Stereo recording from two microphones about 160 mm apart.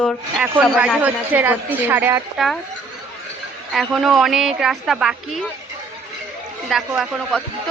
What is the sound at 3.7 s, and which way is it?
A woman's voice, centre (ahead or behind).